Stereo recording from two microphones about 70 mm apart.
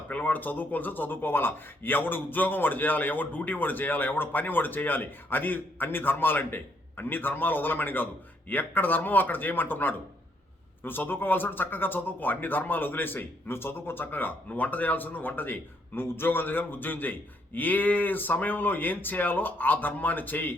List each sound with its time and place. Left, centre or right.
0.1 s speech: left